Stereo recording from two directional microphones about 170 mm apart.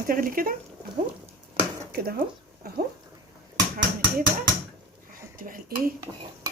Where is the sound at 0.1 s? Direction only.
55° right (ahead or behind).